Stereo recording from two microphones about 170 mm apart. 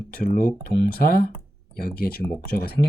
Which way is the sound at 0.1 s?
55° left (ahead or behind).